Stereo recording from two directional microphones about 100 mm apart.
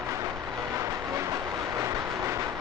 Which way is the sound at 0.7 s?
30° right (ahead or behind).